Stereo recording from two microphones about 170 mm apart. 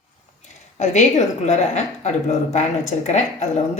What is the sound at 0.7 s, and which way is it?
A woman's voice, 40° left (ahead or behind).